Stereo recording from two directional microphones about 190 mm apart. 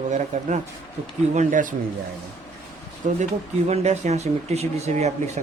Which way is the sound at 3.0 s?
40° right (ahead or behind).